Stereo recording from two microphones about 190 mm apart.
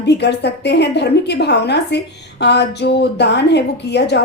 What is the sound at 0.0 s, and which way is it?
A woman's voice, 65° left (ahead or behind).